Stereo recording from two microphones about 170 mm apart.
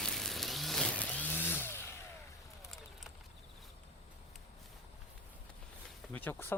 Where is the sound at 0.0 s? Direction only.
Centre (ahead or behind).